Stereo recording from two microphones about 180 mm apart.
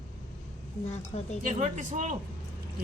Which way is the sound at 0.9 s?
35° left (ahead or behind).